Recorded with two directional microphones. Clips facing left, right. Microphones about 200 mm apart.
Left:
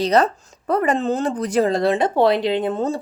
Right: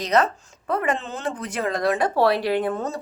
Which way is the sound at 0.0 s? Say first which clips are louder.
Left 4 dB; 35° left (ahead or behind).